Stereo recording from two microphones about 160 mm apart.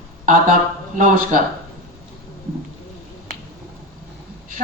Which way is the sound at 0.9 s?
55° right (ahead or behind).